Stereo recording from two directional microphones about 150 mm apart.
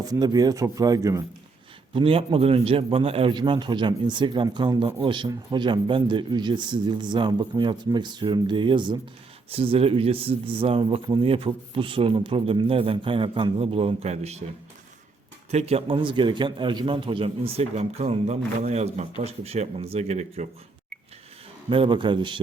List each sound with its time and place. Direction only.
0.0 s speech: 25° right (ahead or behind)
1.9 s speech: 35° right (ahead or behind)
15.4 s a man's voice: 45° right (ahead or behind)
21.7 s speech: 35° right (ahead or behind)